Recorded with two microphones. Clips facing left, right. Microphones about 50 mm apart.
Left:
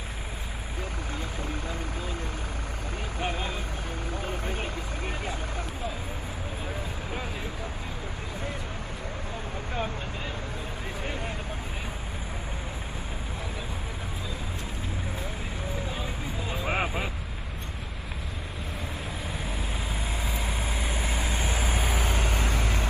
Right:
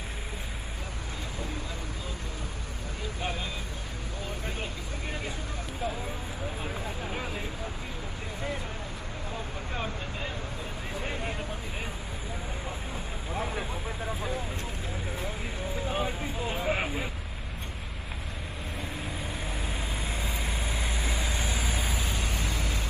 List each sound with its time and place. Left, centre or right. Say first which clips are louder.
3.2 s vehicle: left 4 dB; left
15.9 s vehicle: right 3 dB; right
16.6 s vehicle: left 2 dB; left
20.6 s vehicle: left 1 dB; left